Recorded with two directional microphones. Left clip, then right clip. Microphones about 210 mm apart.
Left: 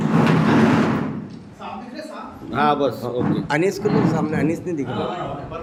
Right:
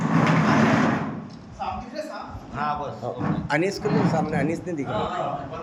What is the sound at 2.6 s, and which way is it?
Speech, 35° left (ahead or behind).